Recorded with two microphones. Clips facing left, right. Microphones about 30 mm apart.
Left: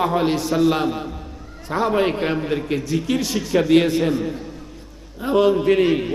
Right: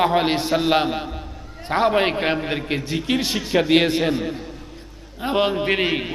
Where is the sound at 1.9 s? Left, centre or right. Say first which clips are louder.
Even; right.